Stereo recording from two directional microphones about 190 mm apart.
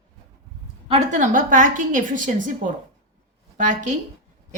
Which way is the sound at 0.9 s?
40° right (ahead or behind).